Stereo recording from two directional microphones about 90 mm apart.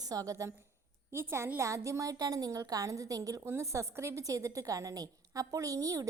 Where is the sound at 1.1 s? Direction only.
30° right (ahead or behind).